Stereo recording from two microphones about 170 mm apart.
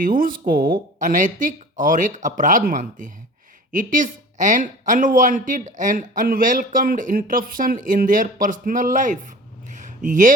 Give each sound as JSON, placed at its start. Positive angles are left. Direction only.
{"t": 0.0, "sound": "speech", "side_deg": -55}